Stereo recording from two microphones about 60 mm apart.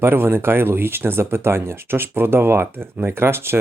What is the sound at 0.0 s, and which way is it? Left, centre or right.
Speech, right.